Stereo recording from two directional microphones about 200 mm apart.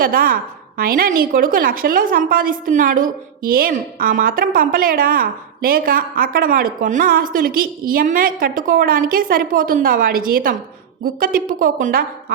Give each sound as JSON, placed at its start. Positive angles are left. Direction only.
{"t": 0.0, "sound": "a woman's voice", "side_deg": -45}